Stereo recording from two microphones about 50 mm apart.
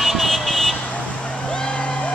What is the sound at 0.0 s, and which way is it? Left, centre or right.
Vehicle, centre.